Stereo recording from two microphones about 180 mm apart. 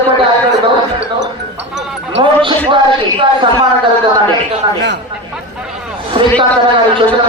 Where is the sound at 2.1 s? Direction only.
25° right (ahead or behind).